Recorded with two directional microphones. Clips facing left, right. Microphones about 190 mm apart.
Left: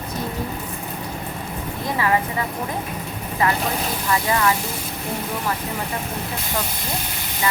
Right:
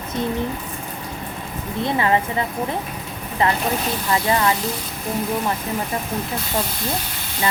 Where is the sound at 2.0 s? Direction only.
25° right (ahead or behind).